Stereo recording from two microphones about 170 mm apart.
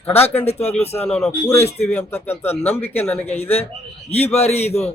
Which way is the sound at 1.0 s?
5° left (ahead or behind).